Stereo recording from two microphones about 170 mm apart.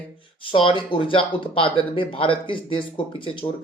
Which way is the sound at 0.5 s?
30° left (ahead or behind).